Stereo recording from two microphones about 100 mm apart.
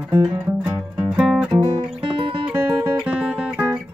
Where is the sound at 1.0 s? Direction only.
5° right (ahead or behind).